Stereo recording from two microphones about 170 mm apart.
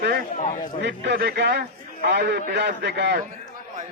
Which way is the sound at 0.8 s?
85° right.